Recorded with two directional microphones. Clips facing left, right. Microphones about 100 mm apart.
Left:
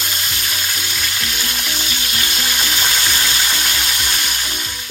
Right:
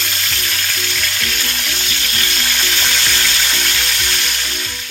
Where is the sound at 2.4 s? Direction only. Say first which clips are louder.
Left 1 dB; 15° left (ahead or behind).